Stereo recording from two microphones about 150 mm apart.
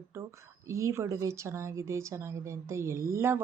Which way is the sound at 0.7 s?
20° right (ahead or behind).